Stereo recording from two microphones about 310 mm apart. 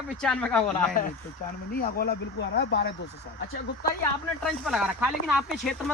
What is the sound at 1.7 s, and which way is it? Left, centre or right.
Speech, left.